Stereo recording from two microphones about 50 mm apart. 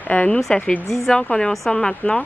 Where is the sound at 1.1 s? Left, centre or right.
Centre.